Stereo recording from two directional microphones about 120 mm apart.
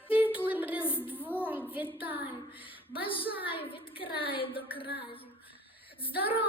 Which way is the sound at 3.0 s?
45° left (ahead or behind).